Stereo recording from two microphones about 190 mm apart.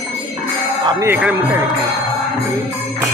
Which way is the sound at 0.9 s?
15° right (ahead or behind).